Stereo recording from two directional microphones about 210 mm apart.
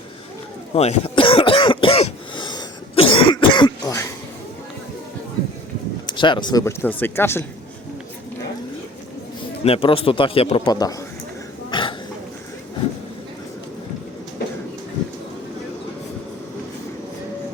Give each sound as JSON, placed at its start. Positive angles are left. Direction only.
{"t": 0.7, "sound": "cough", "side_deg": 30}
{"t": 6.1, "sound": "speech", "side_deg": 20}
{"t": 9.6, "sound": "a man's voice", "side_deg": 25}
{"t": 11.7, "sound": "burping", "side_deg": 25}